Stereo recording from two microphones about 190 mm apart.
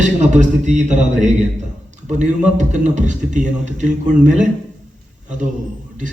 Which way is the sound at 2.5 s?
40° right (ahead or behind).